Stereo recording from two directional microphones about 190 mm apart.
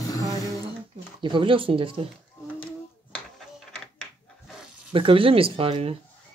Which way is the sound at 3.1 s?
5° left (ahead or behind).